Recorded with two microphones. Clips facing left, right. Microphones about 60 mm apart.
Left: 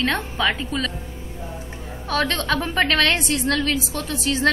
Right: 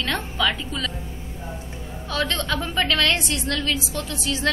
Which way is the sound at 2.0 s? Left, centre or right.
Left.